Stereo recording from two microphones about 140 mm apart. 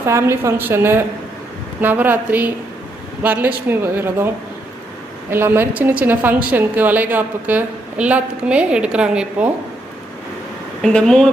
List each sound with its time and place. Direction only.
0.0 s a woman's voice: 20° right (ahead or behind)
5.3 s a woman's voice: 15° right (ahead or behind)
10.8 s speech: 5° left (ahead or behind)